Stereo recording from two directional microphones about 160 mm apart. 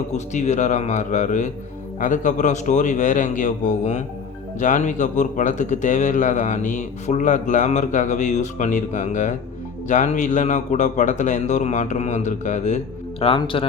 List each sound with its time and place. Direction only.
0.1 s a man's voice: 45° left (ahead or behind)